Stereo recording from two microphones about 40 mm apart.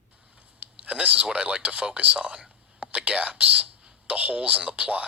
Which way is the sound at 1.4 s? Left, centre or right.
Right.